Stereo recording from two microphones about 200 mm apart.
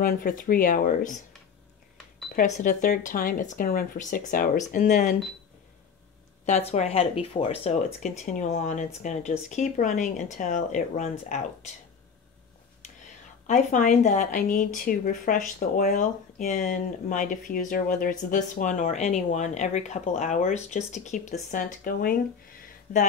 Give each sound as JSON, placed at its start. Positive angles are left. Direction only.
{"t": 0.0, "sound": "speech", "side_deg": 45}
{"t": 2.3, "sound": "speech", "side_deg": 40}
{"t": 6.4, "sound": "speech", "side_deg": 35}
{"t": 13.5, "sound": "speech", "side_deg": 40}